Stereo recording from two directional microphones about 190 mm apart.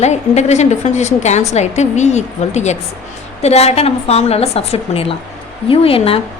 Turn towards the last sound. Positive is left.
turn(degrees=30)  # may be behind; listen again after turning